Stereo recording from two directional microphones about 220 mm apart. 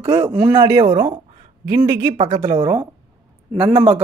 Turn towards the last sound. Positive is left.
turn(degrees=-10)  # may be behind; listen again after turning